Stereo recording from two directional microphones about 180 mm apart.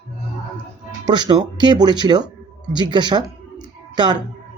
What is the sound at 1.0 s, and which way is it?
Speech, 25° right (ahead or behind).